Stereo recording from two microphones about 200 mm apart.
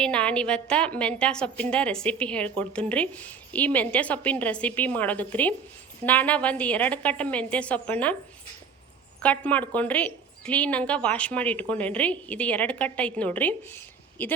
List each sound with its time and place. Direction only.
0.0 s a woman's voice: 5° left (ahead or behind)
9.2 s a woman's voice: 5° left (ahead or behind)